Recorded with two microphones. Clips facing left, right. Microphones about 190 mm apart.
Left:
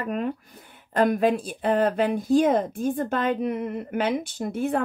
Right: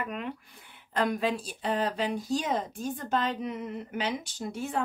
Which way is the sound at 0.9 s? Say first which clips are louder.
Left 7 dB; 55° left (ahead or behind).